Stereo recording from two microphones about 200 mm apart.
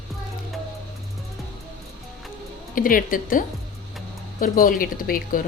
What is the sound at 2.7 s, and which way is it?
Speech, 45° left (ahead or behind).